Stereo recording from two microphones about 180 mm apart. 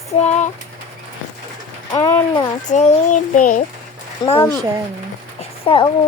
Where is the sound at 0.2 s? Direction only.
40° left (ahead or behind).